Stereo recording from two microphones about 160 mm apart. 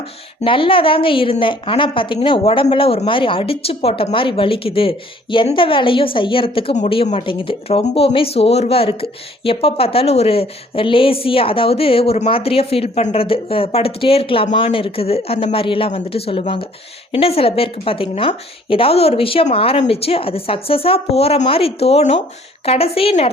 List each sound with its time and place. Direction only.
0.4 s a woman's voice: 35° left (ahead or behind)